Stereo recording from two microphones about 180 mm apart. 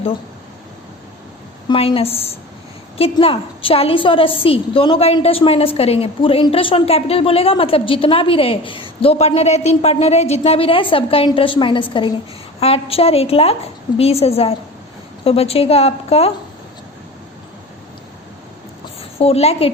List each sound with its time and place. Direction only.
1.7 s a woman's voice: 30° left (ahead or behind)
19.2 s a woman's voice: 35° left (ahead or behind)